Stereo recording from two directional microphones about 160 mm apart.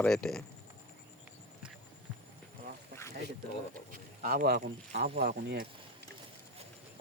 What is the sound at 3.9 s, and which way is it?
Speech, 60° right (ahead or behind).